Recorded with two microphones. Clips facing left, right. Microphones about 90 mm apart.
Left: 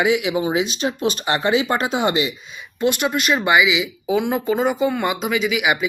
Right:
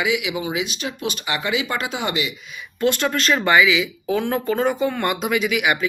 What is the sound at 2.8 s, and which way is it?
Speech, 15° left (ahead or behind).